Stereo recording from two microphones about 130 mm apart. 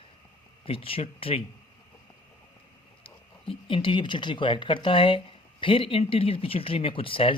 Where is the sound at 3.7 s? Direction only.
40° left (ahead or behind).